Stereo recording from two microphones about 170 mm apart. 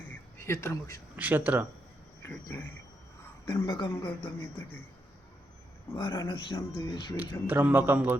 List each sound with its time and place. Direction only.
0.1 s a sound: 15° left (ahead or behind)
1.1 s speech: 10° right (ahead or behind)
2.2 s a woman's voice: 10° left (ahead or behind)
3.8 s speech: 30° left (ahead or behind)
6.0 s speech: 25° left (ahead or behind)
7.4 s a man's voice: 10° right (ahead or behind)